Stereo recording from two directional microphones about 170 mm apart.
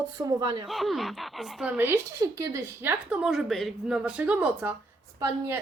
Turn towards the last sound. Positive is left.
turn(degrees=-20)  # may be behind; listen again after turning